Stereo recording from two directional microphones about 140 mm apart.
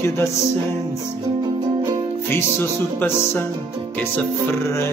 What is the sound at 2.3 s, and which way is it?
Music, 15° left (ahead or behind).